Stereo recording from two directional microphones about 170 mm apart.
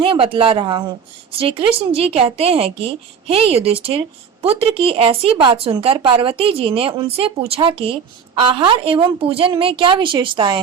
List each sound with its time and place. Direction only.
0.0 s a woman's voice: 30° right (ahead or behind)